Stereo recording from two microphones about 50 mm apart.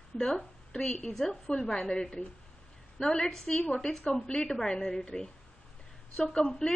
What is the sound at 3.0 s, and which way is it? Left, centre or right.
A woman's voice, centre.